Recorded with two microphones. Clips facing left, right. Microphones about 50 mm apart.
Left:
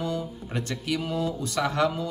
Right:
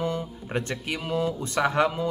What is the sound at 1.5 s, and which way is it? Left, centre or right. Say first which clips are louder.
Speech: right 2 dB; right.